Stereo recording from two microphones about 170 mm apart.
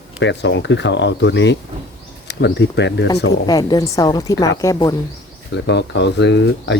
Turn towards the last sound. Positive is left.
turn(degrees=90)